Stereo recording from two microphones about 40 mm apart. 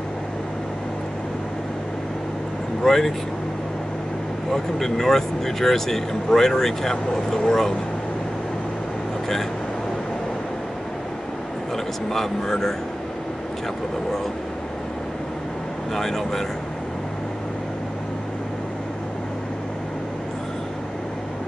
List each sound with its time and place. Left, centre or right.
2.8 s speech: centre
4.5 s speech: centre
11.7 s speech: centre
15.9 s speech: centre